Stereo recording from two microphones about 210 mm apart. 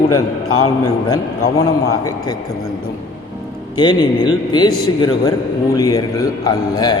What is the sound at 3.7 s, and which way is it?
A man's voice, 20° left (ahead or behind).